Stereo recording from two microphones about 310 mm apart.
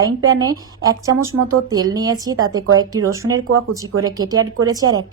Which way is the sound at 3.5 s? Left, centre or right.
Right.